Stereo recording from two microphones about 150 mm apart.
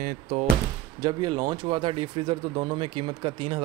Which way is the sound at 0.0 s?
55° right (ahead or behind).